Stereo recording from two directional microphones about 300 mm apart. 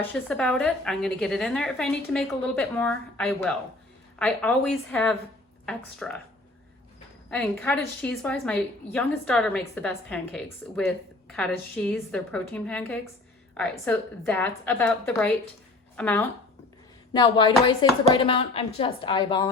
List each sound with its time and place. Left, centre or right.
0.0 s a woman's voice: centre
7.3 s a woman's voice: centre